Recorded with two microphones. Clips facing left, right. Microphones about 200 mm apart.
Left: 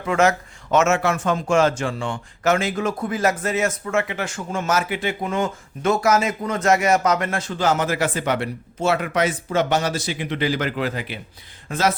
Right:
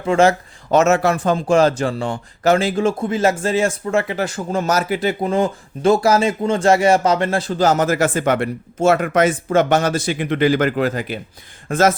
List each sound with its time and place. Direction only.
0.0 s speech: 30° right (ahead or behind); by 11.9 s 50° right (ahead or behind)